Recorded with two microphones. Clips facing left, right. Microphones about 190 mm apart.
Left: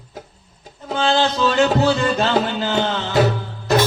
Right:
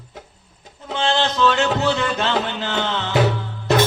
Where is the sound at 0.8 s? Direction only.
40° left (ahead or behind).